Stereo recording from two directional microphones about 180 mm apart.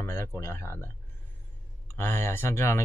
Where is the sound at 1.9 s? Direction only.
15° left (ahead or behind).